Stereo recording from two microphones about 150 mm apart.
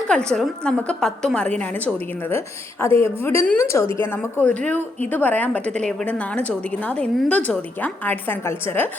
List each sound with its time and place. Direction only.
0.1 s a woman's voice: 5° left (ahead or behind)